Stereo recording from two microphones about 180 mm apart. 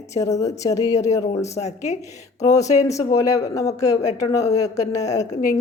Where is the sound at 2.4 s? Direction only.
20° left (ahead or behind).